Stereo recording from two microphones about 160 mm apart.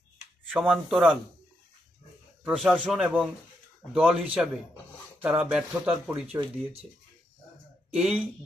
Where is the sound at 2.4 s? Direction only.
5° right (ahead or behind).